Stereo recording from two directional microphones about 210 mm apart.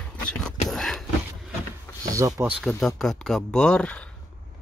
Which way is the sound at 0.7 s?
Centre (ahead or behind).